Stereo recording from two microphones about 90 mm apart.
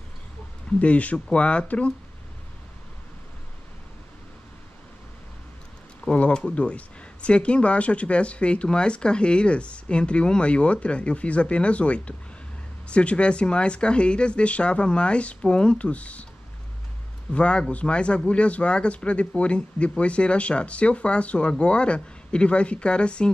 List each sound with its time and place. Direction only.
0.7 s speech: 15° left (ahead or behind)
6.0 s speech: 10° left (ahead or behind)
17.3 s speech: 10° left (ahead or behind)